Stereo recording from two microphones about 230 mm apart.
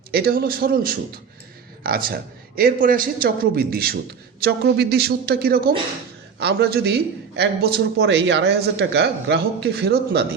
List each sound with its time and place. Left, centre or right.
0.1 s a man's voice: right